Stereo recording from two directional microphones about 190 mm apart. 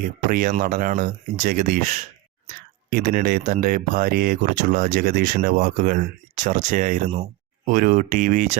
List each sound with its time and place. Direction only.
0.0 s speech: 45° right (ahead or behind)